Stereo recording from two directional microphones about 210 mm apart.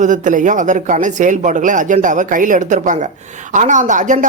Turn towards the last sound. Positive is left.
turn(degrees=-35)  # may be behind; listen again after turning